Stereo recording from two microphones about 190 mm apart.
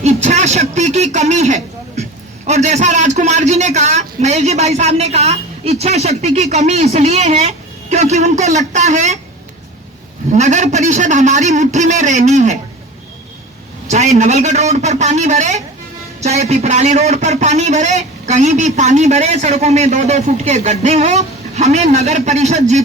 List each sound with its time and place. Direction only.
0.0 s a sound: 40° right (ahead or behind)
2.5 s a man's voice: 35° right (ahead or behind)
10.3 s a man's voice: 40° right (ahead or behind)
13.8 s a man's voice: 35° right (ahead or behind)